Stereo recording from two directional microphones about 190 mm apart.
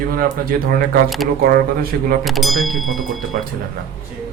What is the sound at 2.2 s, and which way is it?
Speech, centre (ahead or behind).